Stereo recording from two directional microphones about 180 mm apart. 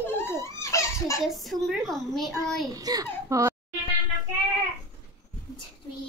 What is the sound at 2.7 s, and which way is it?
Speech, 20° right (ahead or behind).